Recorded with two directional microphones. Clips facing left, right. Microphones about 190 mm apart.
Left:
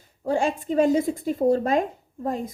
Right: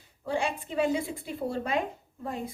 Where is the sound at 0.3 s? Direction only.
45° left (ahead or behind).